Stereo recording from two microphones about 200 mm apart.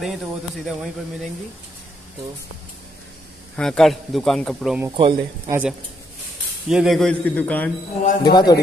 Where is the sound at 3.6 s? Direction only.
Centre (ahead or behind).